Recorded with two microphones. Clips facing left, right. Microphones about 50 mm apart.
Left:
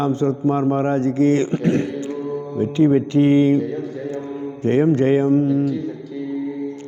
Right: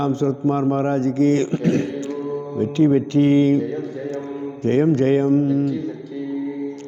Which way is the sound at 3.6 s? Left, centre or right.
Right.